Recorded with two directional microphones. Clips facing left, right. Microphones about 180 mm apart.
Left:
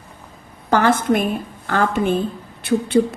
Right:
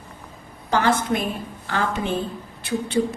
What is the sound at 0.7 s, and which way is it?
A woman's voice, 50° left (ahead or behind).